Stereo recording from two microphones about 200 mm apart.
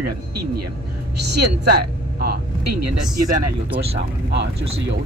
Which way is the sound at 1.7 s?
50° right (ahead or behind).